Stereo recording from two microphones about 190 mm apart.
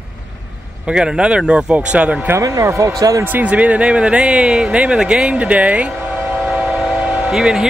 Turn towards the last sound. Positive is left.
turn(degrees=-5)  # may be behind; listen again after turning